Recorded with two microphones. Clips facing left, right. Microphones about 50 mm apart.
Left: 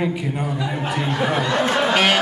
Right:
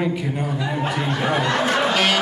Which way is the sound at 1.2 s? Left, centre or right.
Centre.